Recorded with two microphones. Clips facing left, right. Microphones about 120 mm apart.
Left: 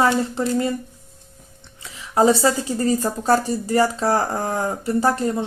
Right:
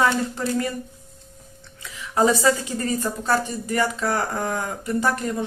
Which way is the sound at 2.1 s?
30° left (ahead or behind).